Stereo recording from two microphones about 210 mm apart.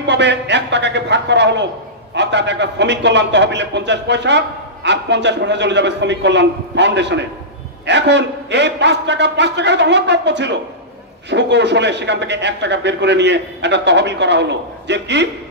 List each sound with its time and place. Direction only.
0.0 s a man's voice: 55° right (ahead or behind)